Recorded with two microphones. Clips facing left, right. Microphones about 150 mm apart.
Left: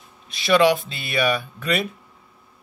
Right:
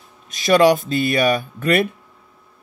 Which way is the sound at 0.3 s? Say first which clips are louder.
Right 3 dB; 45° right (ahead or behind).